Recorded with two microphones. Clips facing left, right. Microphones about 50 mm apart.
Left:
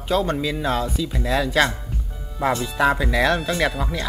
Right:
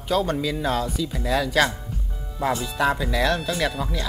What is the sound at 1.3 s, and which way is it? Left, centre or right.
Speech, centre.